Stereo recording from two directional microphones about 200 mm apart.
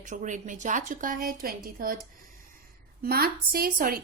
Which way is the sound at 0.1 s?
40° right (ahead or behind).